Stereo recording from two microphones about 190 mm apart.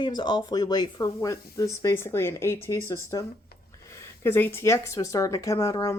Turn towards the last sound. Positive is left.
turn(degrees=15)  # may be behind; listen again after turning